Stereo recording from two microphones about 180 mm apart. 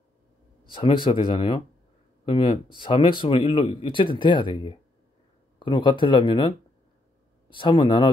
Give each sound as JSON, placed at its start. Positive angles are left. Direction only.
{"t": 0.7, "sound": "speech", "side_deg": 30}
{"t": 7.5, "sound": "speech", "side_deg": 25}